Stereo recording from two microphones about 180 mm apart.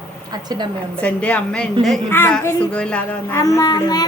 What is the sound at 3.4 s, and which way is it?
Child singing, 20° left (ahead or behind).